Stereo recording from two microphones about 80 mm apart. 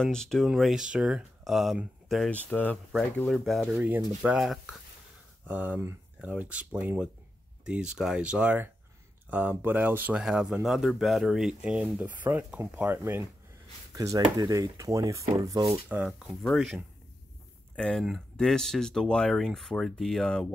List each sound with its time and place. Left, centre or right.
0.0 s speech: centre
2.3 s speech: centre
3.3 s speech: centre
3.8 s speech: centre
4.4 s speech: centre
5.5 s speech: right
10.1 s speech: centre
11.7 s speech: centre
13.9 s speech: right
15.9 s speech: centre
16.3 s speech: centre
17.7 s speech: centre